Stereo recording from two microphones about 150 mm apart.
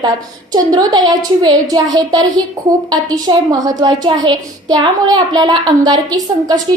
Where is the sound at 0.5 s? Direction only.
25° right (ahead or behind).